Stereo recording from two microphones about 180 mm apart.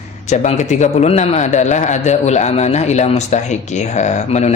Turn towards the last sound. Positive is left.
turn(degrees=40)  # may be behind; listen again after turning